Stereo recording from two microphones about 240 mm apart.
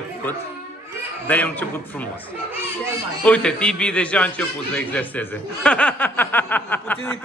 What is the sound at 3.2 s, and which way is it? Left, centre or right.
A man's voice, centre.